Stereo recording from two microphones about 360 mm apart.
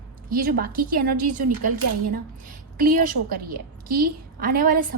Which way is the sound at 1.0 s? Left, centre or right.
Right.